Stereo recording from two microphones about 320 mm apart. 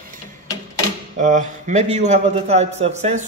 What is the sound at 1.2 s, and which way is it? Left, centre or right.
Speech, right.